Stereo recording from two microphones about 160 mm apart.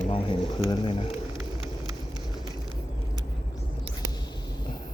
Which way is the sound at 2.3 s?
25° left (ahead or behind).